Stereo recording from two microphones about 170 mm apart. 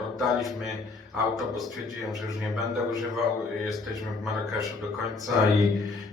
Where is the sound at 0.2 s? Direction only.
Centre (ahead or behind).